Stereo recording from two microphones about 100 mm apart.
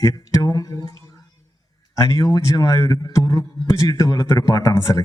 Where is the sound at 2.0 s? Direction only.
35° left (ahead or behind).